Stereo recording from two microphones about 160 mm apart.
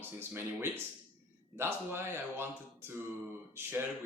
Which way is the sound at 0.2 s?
15° right (ahead or behind).